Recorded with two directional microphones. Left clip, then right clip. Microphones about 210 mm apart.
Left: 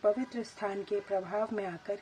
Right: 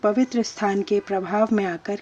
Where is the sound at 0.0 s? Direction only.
35° right (ahead or behind).